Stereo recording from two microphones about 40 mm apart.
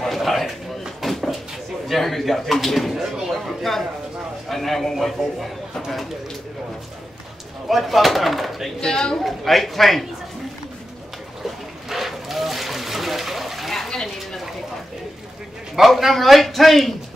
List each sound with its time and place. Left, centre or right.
0.0 s a sound: centre
1.9 s a man's voice: centre
4.9 s speech: centre
7.6 s speech: centre
8.8 s a woman's voice: centre
9.2 s speech: centre
11.9 s splash: centre
16.0 s speech: centre